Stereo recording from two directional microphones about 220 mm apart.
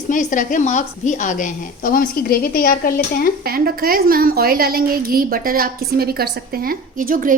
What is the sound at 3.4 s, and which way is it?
A woman's voice, 45° right (ahead or behind).